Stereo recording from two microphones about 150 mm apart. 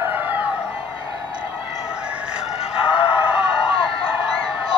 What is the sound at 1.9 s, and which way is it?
Chicken, 5° right (ahead or behind).